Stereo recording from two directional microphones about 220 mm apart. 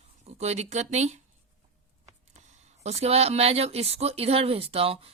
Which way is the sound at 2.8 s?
30° right (ahead or behind).